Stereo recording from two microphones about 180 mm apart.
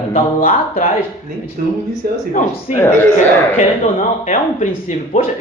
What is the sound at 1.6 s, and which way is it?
Speech, 50° right (ahead or behind).